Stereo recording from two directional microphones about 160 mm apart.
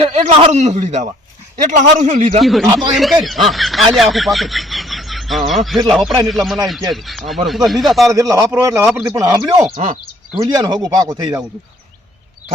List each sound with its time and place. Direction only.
0.0 s a man's voice: 45° right (ahead or behind)
2.4 s speech: centre (ahead or behind)
8.0 s a man's voice: 20° right (ahead or behind)
9.7 s speech: 40° right (ahead or behind)
10.4 s speech: 25° right (ahead or behind)